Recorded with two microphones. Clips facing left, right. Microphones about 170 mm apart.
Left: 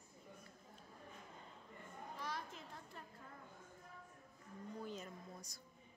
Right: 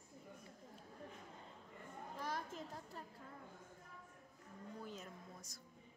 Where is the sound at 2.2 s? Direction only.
45° right (ahead or behind).